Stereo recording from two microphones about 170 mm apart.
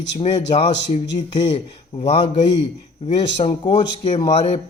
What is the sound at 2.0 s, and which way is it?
Speech, 30° left (ahead or behind).